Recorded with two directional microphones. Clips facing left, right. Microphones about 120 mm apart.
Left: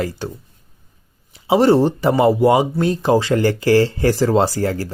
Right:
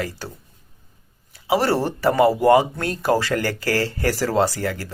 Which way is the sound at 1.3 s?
25° left (ahead or behind).